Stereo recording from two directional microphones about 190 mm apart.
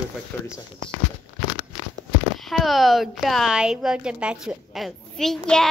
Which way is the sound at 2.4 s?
Centre (ahead or behind).